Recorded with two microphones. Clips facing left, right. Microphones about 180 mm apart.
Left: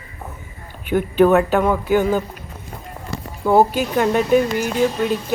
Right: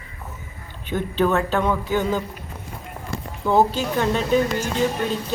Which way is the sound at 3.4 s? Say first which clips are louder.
Left 4 dB; 10° left (ahead or behind).